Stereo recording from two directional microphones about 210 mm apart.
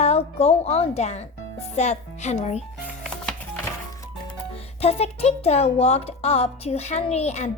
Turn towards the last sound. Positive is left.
turn(degrees=30)  # may be behind; listen again after turning